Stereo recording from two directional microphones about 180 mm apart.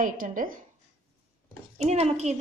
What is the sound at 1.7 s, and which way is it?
Speech, 35° right (ahead or behind).